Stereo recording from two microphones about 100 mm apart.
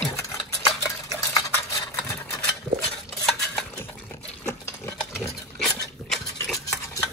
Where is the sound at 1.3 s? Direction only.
35° left (ahead or behind).